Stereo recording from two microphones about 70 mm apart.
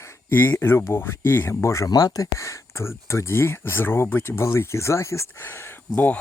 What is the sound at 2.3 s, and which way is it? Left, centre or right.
Speech, left.